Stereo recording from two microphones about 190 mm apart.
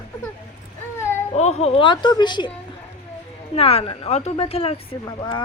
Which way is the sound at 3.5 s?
30° left (ahead or behind).